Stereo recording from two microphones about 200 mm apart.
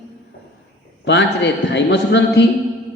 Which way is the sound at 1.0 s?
60° left (ahead or behind).